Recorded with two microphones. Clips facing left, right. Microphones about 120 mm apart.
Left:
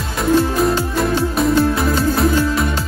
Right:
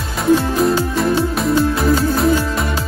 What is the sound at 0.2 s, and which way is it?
Music, centre (ahead or behind).